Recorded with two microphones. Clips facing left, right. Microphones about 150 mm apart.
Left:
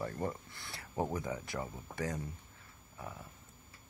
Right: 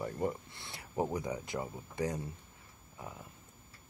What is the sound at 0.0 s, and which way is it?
Speech, 15° right (ahead or behind).